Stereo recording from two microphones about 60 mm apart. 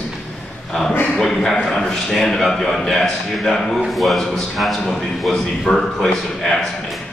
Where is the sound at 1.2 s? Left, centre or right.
Centre.